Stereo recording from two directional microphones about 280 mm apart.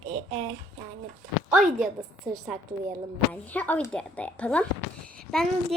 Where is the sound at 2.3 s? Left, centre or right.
Centre.